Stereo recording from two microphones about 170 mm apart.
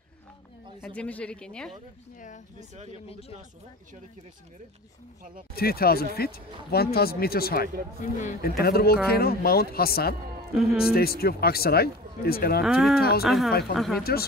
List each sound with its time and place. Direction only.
0.8 s speech: 10° left (ahead or behind)
2.1 s speech: 50° left (ahead or behind)
2.7 s speech: 40° right (ahead or behind)
3.1 s speech: 35° left (ahead or behind)
5.6 s speech: 60° left (ahead or behind)
8.0 s speech: 45° left (ahead or behind)
8.4 s speech: 65° left (ahead or behind)
10.5 s a man's voice: centre (ahead or behind)
10.9 s speech: 65° left (ahead or behind)
12.6 s speech: centre (ahead or behind)